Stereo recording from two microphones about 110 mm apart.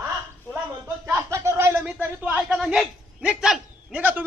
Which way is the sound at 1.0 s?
25° right (ahead or behind).